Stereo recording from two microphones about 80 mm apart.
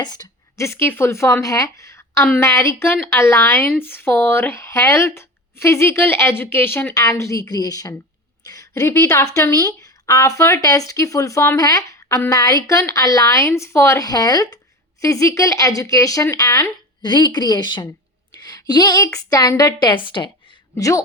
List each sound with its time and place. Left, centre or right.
0.0 s a woman's voice: left
0.5 s speech: left
6.9 s speech: left
14.0 s speech: left
17.0 s a woman's voice: left
18.4 s a sound: left
19.3 s speech: left
19.9 s a woman's voice: left
20.7 s speech: left